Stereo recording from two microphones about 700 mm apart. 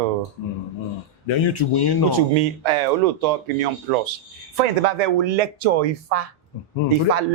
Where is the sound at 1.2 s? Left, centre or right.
Left.